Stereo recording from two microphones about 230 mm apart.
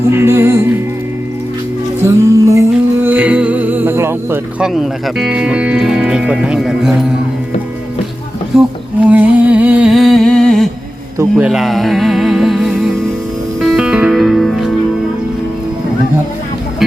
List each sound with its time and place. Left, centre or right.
0.1 s music: centre
2.0 s music: centre
8.5 s speech: centre
9.0 s a sound: centre
11.2 s music: centre